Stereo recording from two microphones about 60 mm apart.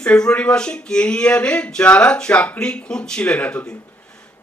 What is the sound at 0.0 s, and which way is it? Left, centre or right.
Speech, centre.